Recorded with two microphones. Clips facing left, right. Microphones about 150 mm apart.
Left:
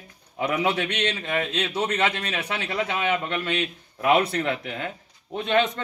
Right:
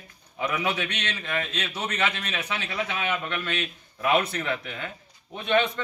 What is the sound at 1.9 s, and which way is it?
A man's voice, 60° left (ahead or behind).